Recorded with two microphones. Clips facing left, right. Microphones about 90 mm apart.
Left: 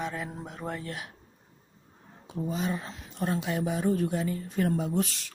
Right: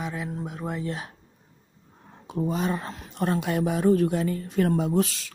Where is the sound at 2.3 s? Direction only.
60° right (ahead or behind).